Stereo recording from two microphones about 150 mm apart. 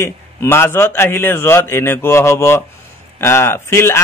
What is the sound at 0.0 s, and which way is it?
A man's voice, 15° left (ahead or behind).